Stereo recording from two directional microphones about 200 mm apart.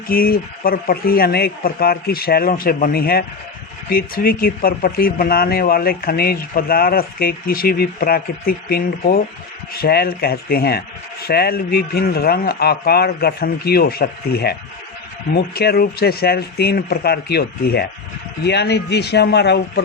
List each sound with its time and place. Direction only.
0.1 s a man's voice: 50° left (ahead or behind)